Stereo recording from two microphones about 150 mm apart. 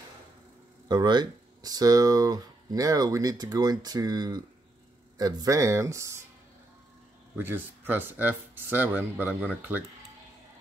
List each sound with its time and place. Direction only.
0.8 s speech: 30° right (ahead or behind)
7.3 s speech: 15° right (ahead or behind)